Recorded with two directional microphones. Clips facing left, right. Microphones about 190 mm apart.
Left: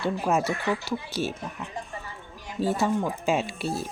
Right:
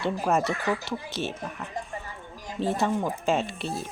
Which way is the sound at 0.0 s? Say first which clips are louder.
Even; 5° left (ahead or behind).